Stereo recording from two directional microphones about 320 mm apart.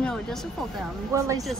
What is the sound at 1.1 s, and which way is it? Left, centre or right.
Speech, centre.